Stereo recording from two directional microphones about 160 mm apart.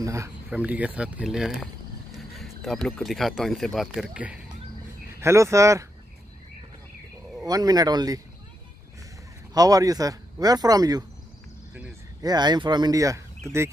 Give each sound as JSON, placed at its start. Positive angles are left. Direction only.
{"t": 0.0, "sound": "a man's voice", "side_deg": -20}
{"t": 0.5, "sound": "speech", "side_deg": -10}
{"t": 5.2, "sound": "speech", "side_deg": -20}
{"t": 7.4, "sound": "speech", "side_deg": -25}
{"t": 9.5, "sound": "speech", "side_deg": -25}
{"t": 12.2, "sound": "speech", "side_deg": -25}